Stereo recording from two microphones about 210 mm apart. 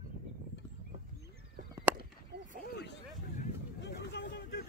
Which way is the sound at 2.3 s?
50° right (ahead or behind).